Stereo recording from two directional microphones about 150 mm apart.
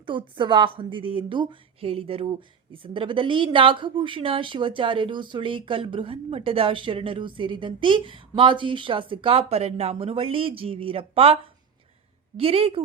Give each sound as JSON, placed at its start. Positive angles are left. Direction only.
{"t": 0.0, "sound": "a woman's voice", "side_deg": -35}
{"t": 12.4, "sound": "a woman's voice", "side_deg": -40}